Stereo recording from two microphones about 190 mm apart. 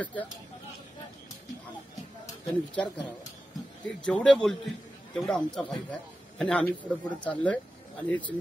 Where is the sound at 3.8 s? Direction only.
5° left (ahead or behind).